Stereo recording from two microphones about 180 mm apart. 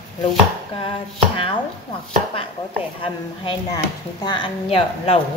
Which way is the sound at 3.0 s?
25° left (ahead or behind).